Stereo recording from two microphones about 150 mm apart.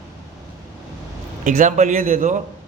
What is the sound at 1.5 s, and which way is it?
Speech, 55° right (ahead or behind).